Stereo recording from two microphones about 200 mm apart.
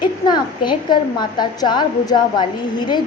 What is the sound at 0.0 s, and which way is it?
A woman's voice, 20° left (ahead or behind).